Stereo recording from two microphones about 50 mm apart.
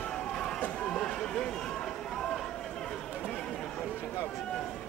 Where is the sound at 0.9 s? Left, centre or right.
Centre.